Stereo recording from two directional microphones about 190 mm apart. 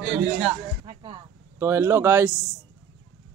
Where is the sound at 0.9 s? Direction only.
30° right (ahead or behind).